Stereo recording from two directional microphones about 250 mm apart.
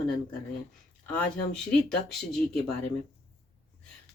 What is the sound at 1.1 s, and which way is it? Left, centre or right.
Speech, centre.